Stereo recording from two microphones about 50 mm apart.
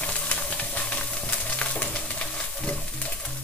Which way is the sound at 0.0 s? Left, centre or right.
Left.